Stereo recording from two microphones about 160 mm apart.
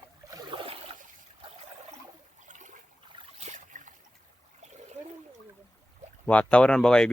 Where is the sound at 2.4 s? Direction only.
50° right (ahead or behind).